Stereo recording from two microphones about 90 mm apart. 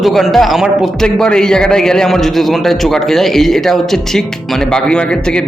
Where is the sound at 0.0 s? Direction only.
Centre (ahead or behind).